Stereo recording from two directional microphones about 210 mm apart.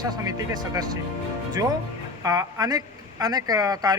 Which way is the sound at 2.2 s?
15° right (ahead or behind).